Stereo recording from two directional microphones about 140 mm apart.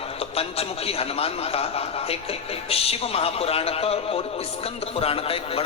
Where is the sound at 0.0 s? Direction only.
45° left (ahead or behind).